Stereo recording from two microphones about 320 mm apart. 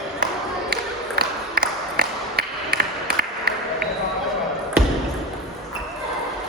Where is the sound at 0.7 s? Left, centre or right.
Right.